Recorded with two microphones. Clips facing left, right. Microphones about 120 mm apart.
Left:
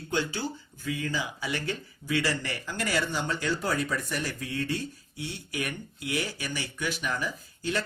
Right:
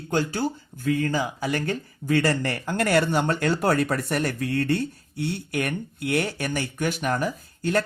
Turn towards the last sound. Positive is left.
turn(degrees=-50)  # may be behind; listen again after turning